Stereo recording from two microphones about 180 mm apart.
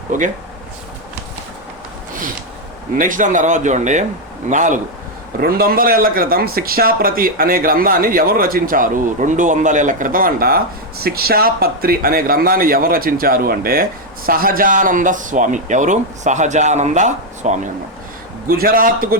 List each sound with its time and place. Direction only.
0.1 s a man's voice: 45° right (ahead or behind)
3.0 s a man's voice: 45° right (ahead or behind)
5.4 s a man's voice: 55° right (ahead or behind); by 17.6 s 40° right (ahead or behind)
18.4 s a man's voice: 55° right (ahead or behind)